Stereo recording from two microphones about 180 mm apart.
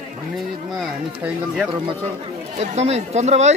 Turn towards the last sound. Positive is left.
turn(degrees=-40)  # may be behind; listen again after turning